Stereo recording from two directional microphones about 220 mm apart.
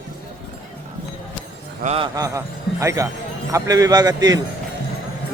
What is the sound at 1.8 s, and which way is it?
Speech, 25° right (ahead or behind).